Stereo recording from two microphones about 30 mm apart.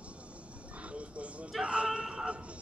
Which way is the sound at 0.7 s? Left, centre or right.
Right.